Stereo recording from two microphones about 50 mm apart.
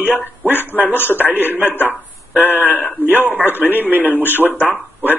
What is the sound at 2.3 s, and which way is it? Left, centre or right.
Speech, right.